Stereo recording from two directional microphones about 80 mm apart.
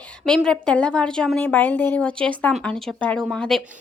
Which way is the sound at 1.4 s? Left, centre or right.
Left.